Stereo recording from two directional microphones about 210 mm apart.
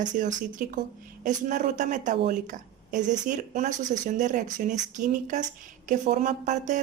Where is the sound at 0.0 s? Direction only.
35° right (ahead or behind).